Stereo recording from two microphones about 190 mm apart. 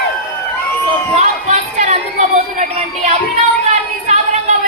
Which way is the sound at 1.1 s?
35° right (ahead or behind).